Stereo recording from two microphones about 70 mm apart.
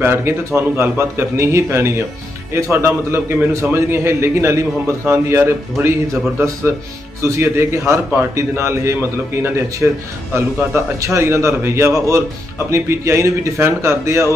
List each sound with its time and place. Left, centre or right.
0.0 s a man's voice: right
9.8 s a man's voice: right
10.3 s a man's voice: right